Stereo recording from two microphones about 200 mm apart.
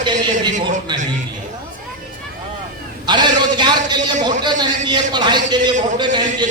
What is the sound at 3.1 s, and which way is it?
A man's voice, 20° right (ahead or behind).